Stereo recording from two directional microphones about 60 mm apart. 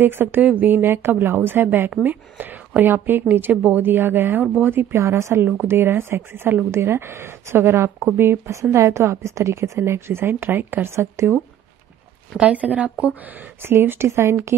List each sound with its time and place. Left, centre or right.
0.0 s a woman's voice: right
8.5 s a woman's voice: right
10.9 s a woman's voice: right
12.4 s a woman's voice: right
13.6 s a woman's voice: right